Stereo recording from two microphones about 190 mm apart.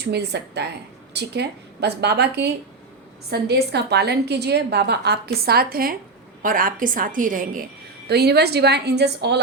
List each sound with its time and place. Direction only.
0.0 s a woman's voice: 60° right (ahead or behind)